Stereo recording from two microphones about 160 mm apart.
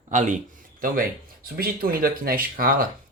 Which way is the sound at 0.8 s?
65° right (ahead or behind).